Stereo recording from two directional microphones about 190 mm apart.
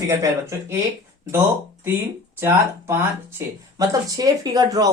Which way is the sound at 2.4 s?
15° right (ahead or behind).